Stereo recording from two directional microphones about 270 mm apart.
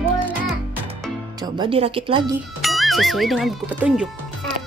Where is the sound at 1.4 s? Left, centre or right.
Centre.